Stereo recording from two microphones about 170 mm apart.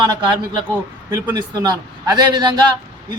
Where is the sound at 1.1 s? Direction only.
20° right (ahead or behind).